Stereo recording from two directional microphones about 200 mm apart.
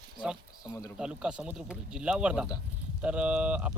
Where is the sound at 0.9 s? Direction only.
5° right (ahead or behind).